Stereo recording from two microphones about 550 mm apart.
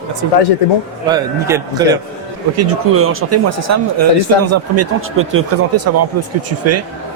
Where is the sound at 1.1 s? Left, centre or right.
Centre.